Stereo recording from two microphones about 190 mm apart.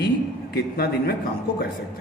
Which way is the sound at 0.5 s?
55° left (ahead or behind).